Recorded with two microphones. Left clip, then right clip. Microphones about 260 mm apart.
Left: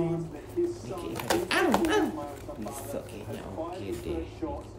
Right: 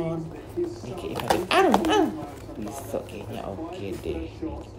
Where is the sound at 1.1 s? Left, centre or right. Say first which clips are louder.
Right 6 dB; centre.